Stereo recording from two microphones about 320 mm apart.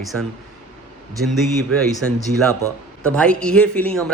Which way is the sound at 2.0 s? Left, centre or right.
Centre.